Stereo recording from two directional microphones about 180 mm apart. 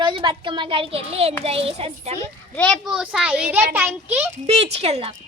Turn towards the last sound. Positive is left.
turn(degrees=-35)  # may be behind; listen again after turning